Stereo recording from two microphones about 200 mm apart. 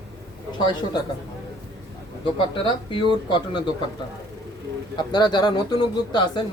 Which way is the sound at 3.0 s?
25° left (ahead or behind).